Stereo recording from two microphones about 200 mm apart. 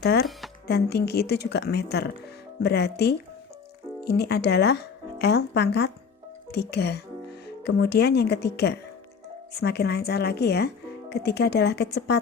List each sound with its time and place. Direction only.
0.0 s a woman's voice: 55° left (ahead or behind)